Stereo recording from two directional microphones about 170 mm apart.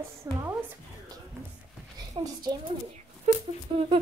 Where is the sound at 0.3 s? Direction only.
20° right (ahead or behind).